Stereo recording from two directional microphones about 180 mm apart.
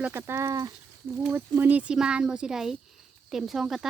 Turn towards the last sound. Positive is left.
turn(degrees=0)  # may be behind; listen again after turning